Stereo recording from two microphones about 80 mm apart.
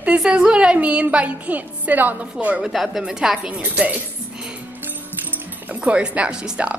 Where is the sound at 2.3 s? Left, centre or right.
Centre.